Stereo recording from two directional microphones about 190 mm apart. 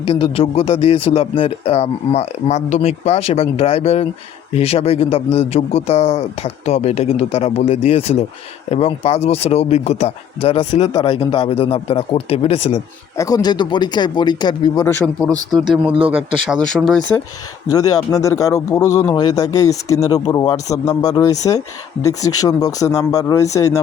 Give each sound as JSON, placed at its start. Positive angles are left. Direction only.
{"t": 0.1, "sound": "speech", "side_deg": 30}
{"t": 13.1, "sound": "speech", "side_deg": 20}
{"t": 15.3, "sound": "speech", "side_deg": -20}
{"t": 15.7, "sound": "speech", "side_deg": -5}
{"t": 17.7, "sound": "speech", "side_deg": 20}